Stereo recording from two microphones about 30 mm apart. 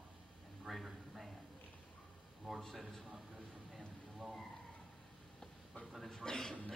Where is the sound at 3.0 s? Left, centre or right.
Centre.